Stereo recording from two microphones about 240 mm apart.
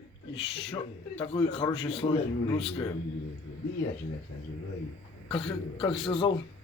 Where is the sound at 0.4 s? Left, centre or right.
Left.